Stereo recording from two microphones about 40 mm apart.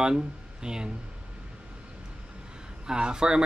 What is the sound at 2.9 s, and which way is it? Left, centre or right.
Speech, centre.